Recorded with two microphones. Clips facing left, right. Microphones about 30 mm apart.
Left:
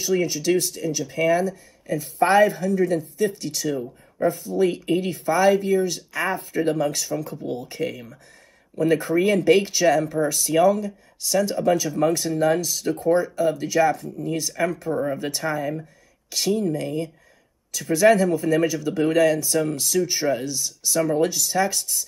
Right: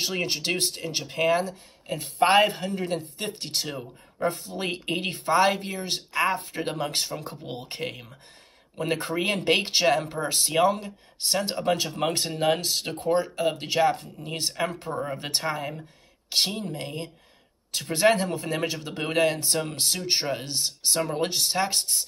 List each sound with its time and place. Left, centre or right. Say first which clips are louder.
0.0 s speech: left 5 dB; right